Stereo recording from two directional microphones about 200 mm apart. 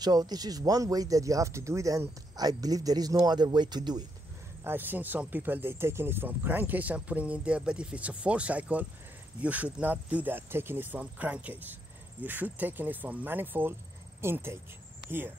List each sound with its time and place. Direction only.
0.0 s speech: 20° right (ahead or behind)
4.6 s speech: 10° right (ahead or behind)